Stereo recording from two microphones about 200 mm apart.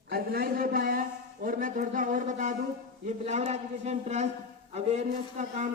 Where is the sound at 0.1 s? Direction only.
50° right (ahead or behind).